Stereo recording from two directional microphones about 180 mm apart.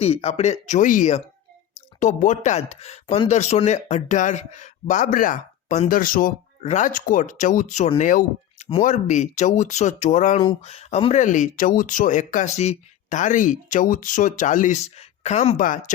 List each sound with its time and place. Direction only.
0.0 s speech: 35° left (ahead or behind)